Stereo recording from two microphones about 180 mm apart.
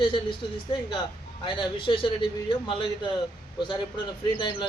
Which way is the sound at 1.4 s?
25° left (ahead or behind).